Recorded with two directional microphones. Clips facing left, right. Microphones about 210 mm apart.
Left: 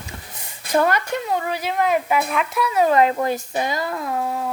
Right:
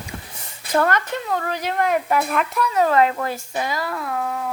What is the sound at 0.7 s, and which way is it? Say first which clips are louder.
Speech: left 1 dB; 10° left (ahead or behind).